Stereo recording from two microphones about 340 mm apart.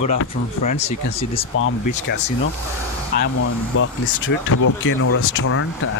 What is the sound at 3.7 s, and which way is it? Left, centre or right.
Speech, left.